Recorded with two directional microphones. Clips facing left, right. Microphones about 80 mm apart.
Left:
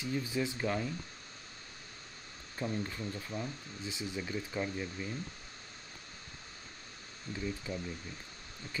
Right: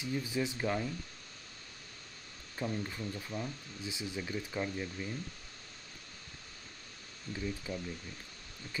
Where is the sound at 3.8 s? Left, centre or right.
Centre.